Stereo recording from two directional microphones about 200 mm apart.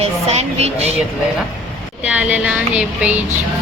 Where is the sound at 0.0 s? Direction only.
30° right (ahead or behind).